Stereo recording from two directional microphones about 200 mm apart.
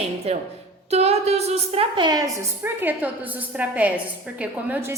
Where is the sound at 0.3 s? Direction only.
30° right (ahead or behind); by 4.9 s 10° right (ahead or behind).